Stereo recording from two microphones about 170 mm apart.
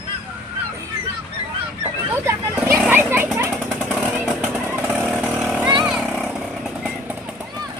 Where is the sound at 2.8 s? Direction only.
10° right (ahead or behind).